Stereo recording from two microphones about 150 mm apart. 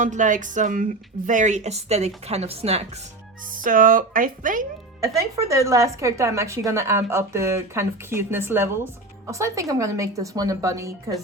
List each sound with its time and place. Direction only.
0.0 s speech: 60° right (ahead or behind)
3.5 s speech: 65° right (ahead or behind)
4.9 s a woman's voice: 20° right (ahead or behind)